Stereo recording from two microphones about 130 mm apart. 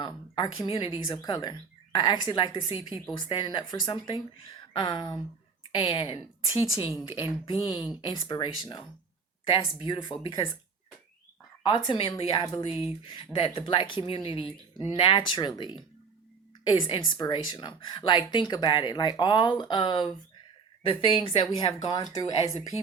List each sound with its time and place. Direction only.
0.0 s a woman's voice: 35° left (ahead or behind)
11.6 s a woman's voice: 40° left (ahead or behind)